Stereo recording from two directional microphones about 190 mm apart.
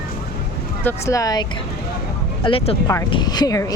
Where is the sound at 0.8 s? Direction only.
10° left (ahead or behind).